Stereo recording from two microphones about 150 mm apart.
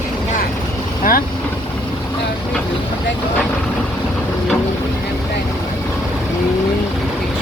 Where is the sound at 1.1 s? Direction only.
65° left (ahead or behind).